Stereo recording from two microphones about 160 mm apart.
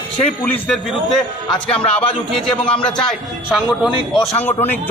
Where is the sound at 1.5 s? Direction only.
35° left (ahead or behind).